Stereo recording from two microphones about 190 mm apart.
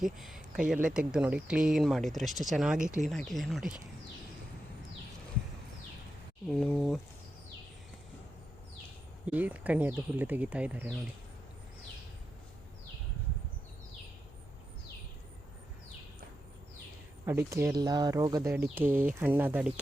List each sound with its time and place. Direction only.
0.0 s speech: centre (ahead or behind)
6.5 s speech: 5° left (ahead or behind)
9.2 s speech: 10° right (ahead or behind)
17.2 s speech: 15° right (ahead or behind)